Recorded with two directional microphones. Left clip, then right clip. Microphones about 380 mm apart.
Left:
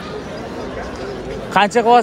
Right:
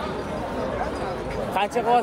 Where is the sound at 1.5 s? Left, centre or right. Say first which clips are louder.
Left 9 dB; left.